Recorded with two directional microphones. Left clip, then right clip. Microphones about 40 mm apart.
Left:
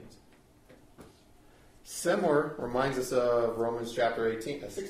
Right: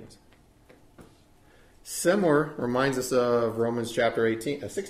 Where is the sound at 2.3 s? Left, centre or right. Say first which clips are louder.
Right 3 dB; right.